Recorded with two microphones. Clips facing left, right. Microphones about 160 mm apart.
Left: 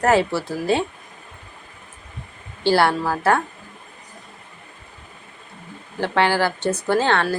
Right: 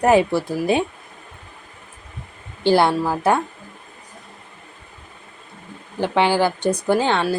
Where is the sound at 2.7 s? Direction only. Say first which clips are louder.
Right 2 dB; 15° right (ahead or behind).